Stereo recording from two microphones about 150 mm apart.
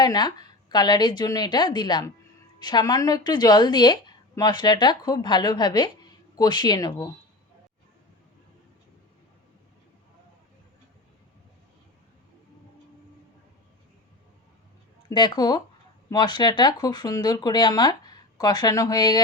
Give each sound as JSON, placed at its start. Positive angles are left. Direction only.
{"t": 0.0, "sound": "a woman's voice", "side_deg": 25}
{"t": 15.1, "sound": "a woman's voice", "side_deg": 30}